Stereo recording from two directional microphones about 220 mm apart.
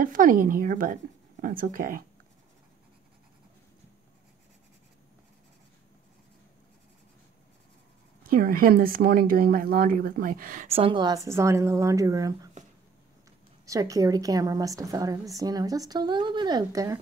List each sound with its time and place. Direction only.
0.0 s speech: 40° right (ahead or behind)
8.2 s speech: 40° right (ahead or behind); by 12.4 s 15° right (ahead or behind)
13.7 s a woman's voice: 15° right (ahead or behind)